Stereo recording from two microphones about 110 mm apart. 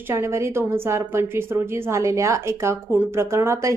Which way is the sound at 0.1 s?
25° right (ahead or behind).